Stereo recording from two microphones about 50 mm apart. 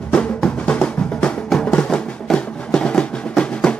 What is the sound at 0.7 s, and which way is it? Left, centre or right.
Drum, left.